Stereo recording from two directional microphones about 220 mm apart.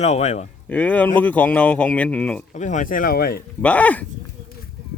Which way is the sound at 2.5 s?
35° left (ahead or behind).